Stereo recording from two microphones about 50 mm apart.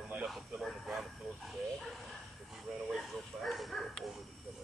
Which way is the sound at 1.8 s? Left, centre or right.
Centre.